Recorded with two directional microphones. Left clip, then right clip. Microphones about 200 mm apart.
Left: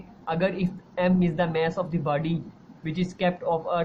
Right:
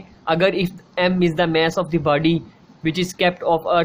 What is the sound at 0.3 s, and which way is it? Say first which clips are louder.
Speech: right 9 dB; 50° right (ahead or behind).